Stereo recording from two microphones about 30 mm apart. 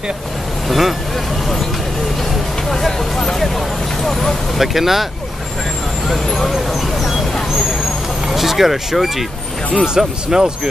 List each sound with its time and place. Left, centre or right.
0.7 s speech: centre
2.7 s speech: centre
4.6 s speech: centre
7.0 s vehicle: centre
8.3 s speech: centre
9.9 s speech: right